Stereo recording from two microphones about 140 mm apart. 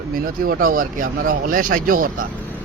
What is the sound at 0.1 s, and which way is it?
Speech, 90° right.